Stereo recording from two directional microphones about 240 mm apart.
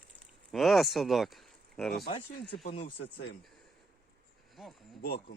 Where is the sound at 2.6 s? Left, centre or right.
Left.